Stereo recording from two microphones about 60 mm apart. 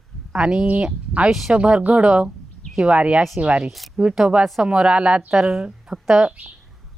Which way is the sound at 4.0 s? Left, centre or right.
Centre.